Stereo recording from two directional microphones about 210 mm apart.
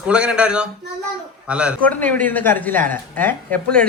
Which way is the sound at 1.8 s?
5° left (ahead or behind).